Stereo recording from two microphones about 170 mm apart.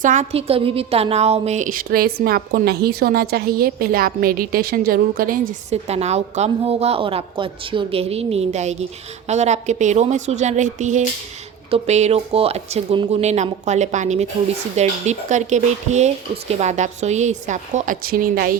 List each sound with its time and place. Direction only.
0.0 s a woman's voice: 45° right (ahead or behind)
5.7 s a woman's voice: 40° right (ahead or behind); by 18.5 s 60° right (ahead or behind)